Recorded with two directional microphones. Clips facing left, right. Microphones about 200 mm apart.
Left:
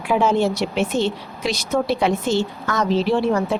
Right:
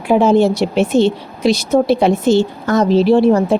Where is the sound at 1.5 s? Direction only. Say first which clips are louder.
Right 9 dB; 70° right (ahead or behind).